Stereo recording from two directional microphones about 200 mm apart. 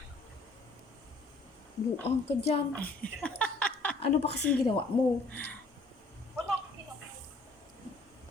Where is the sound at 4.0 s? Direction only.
30° left (ahead or behind).